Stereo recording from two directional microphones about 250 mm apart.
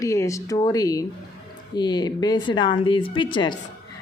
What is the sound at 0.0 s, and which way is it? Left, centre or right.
A woman's voice, centre.